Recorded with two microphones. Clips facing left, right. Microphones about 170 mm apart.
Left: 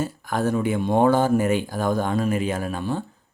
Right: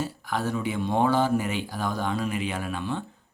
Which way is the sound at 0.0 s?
50° left (ahead or behind).